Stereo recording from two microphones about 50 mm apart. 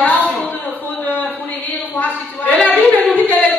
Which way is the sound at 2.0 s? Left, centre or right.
Left.